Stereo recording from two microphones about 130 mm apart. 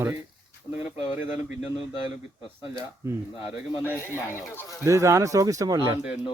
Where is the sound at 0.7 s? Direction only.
15° right (ahead or behind).